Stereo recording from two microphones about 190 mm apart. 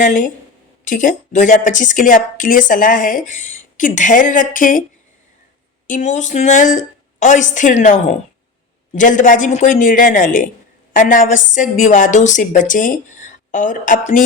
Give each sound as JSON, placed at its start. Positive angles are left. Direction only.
{"t": 0.0, "sound": "speech", "side_deg": 45}
{"t": 5.9, "sound": "speech", "side_deg": 40}